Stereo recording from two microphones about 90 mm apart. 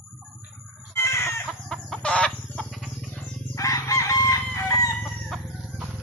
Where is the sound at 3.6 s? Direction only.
40° left (ahead or behind).